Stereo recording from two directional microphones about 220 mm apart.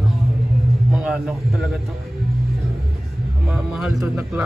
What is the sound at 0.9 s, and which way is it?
Speech, 5° right (ahead or behind).